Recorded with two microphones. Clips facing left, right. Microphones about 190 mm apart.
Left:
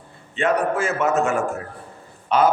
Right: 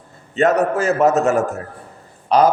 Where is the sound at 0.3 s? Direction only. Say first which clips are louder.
Right 5 dB; 40° right (ahead or behind).